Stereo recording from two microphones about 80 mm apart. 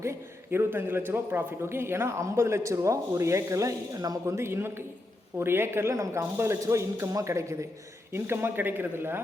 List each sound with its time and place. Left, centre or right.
0.0 s a man's voice: right
4.3 s a man's voice: right